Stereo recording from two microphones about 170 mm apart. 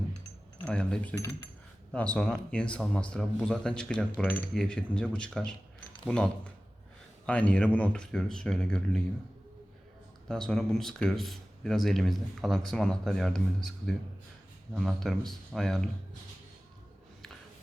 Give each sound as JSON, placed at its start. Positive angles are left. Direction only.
{"t": 0.6, "sound": "speech", "side_deg": 5}
{"t": 10.2, "sound": "speech", "side_deg": 5}